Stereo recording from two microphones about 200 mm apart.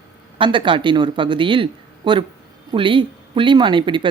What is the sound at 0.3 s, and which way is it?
Speech, 25° right (ahead or behind).